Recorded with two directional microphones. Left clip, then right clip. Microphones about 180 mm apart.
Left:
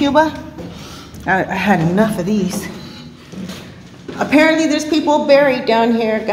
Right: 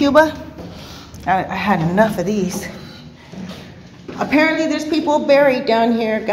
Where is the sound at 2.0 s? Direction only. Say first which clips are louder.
Right 1 dB; 15° right (ahead or behind).